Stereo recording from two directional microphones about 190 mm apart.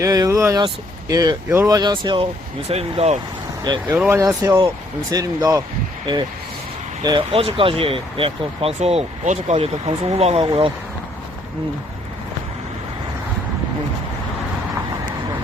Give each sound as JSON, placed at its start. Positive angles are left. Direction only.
{"t": 0.0, "sound": "speech", "side_deg": -20}
{"t": 3.8, "sound": "speech", "side_deg": -10}
{"t": 7.0, "sound": "speech", "side_deg": -25}